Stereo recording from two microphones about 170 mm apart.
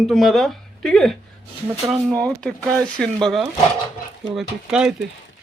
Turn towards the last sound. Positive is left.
turn(degrees=-5)  # may be behind; listen again after turning